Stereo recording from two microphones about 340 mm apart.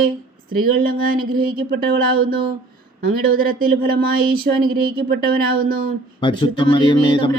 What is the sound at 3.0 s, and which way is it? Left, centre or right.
Speech, right.